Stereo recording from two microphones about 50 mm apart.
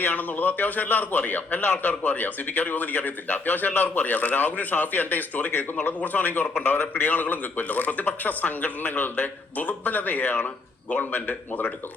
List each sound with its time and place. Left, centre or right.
0.0 s a man's voice: left